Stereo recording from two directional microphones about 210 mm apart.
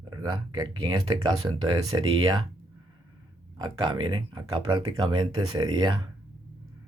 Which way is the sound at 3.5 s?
20° right (ahead or behind).